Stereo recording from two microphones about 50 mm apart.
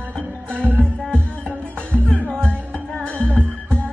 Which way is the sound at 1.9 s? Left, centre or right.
Left.